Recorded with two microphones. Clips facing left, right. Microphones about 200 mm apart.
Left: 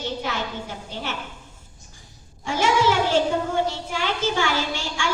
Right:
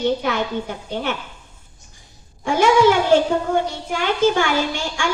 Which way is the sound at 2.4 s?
55° right (ahead or behind).